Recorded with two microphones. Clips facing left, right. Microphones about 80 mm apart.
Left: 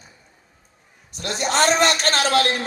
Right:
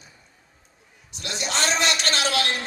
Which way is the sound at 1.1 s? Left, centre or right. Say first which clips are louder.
Left 6 dB; left.